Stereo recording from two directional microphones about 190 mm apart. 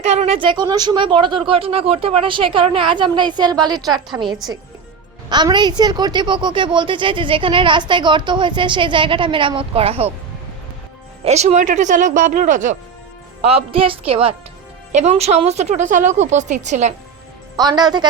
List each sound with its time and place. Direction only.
0.0 s a woman's voice: 35° right (ahead or behind)
5.3 s a woman's voice: 25° right (ahead or behind)
11.2 s a woman's voice: 35° right (ahead or behind)
13.4 s a woman's voice: 30° right (ahead or behind)
17.6 s a woman's voice: 20° right (ahead or behind)